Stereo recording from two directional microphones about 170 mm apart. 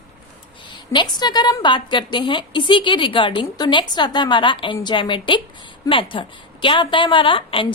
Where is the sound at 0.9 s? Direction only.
25° left (ahead or behind).